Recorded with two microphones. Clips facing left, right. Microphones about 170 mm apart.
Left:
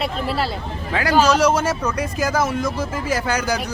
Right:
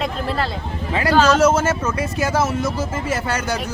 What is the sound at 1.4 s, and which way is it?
Speech, 5° right (ahead or behind).